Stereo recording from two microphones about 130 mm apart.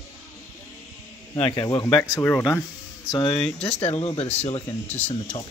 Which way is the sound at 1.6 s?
30° left (ahead or behind).